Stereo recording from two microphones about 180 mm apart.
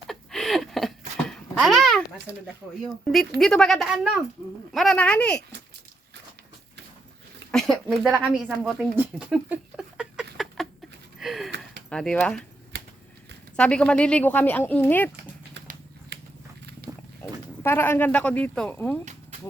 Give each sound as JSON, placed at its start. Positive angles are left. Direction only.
{"t": 0.1, "sound": "a sound", "side_deg": 0}
{"t": 1.3, "sound": "babbling", "side_deg": 0}
{"t": 2.8, "sound": "speech", "side_deg": 0}
{"t": 7.5, "sound": "speech", "side_deg": 0}
{"t": 9.0, "sound": "a sound", "side_deg": -5}
{"t": 11.2, "sound": "gasp", "side_deg": 0}
{"t": 11.9, "sound": "speech", "side_deg": 5}
{"t": 13.6, "sound": "speech", "side_deg": 5}
{"t": 15.1, "sound": "dog", "side_deg": -65}
{"t": 16.9, "sound": "roaring cats", "side_deg": -5}
{"t": 17.2, "sound": "a sound", "side_deg": 15}
{"t": 17.6, "sound": "speech", "side_deg": 15}